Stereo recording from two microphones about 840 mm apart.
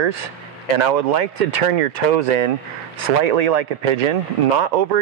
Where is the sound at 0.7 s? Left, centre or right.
Right.